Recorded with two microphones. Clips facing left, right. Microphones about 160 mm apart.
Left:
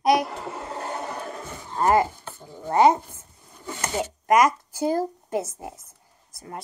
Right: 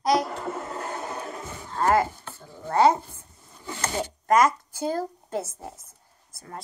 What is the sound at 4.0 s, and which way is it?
A woman's voice, 15° left (ahead or behind).